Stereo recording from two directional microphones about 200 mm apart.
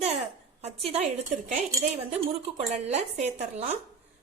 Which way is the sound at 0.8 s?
30° right (ahead or behind).